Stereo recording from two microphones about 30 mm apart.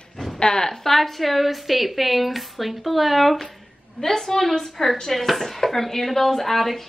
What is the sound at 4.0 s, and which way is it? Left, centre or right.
Speech, centre.